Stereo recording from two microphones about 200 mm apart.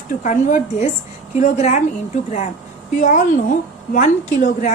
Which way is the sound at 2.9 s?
40° left (ahead or behind).